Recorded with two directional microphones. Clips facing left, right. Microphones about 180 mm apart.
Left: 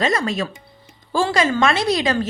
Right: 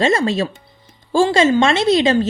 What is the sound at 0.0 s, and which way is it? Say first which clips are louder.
A woman's voice: right 4 dB; 25° right (ahead or behind).